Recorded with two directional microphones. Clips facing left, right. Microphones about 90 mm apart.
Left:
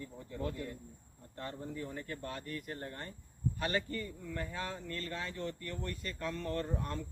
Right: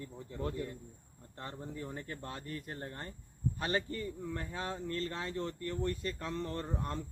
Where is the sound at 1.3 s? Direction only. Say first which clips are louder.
Left 2 dB; 25° right (ahead or behind).